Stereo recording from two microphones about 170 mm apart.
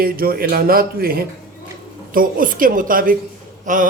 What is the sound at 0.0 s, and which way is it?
A man's voice, 60° right (ahead or behind).